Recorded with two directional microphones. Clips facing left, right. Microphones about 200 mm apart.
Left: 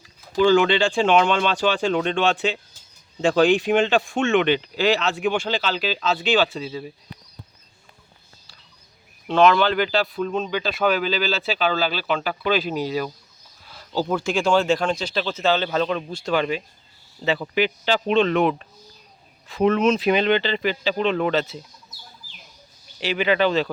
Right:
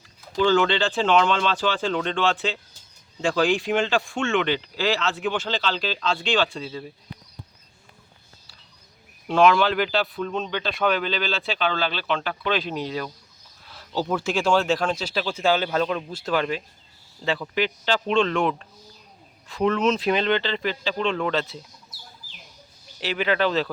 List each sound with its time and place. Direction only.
0.3 s speech: 10° left (ahead or behind)
9.2 s speech: 5° right (ahead or behind)
23.0 s speech: centre (ahead or behind)